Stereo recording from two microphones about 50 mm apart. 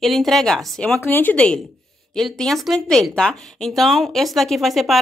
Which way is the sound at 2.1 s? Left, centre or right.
Centre.